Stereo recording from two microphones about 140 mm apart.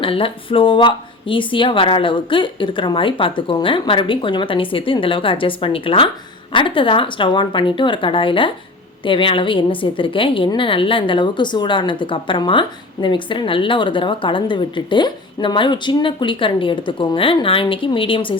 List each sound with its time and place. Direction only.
0.0 s a woman's voice: 40° left (ahead or behind)